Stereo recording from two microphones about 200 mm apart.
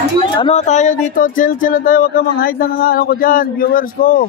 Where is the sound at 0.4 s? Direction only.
30° left (ahead or behind).